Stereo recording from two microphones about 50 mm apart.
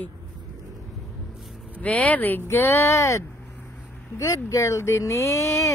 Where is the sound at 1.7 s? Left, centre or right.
Left.